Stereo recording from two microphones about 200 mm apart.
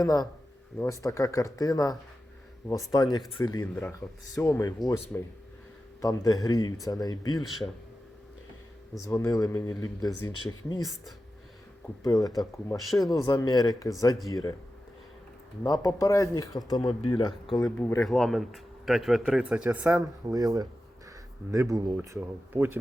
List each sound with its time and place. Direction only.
0.0 s speech: 20° left (ahead or behind)
9.0 s speech: 15° left (ahead or behind)
12.0 s speech: 20° left (ahead or behind)
15.6 s speech: 20° left (ahead or behind)
17.5 s speech: 5° left (ahead or behind); by 22.8 s 10° right (ahead or behind)